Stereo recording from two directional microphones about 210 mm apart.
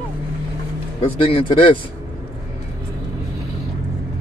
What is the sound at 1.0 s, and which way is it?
Speech, 25° left (ahead or behind).